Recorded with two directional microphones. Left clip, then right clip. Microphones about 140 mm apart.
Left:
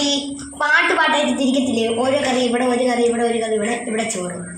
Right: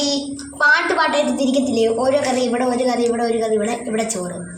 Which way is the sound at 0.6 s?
5° right (ahead or behind).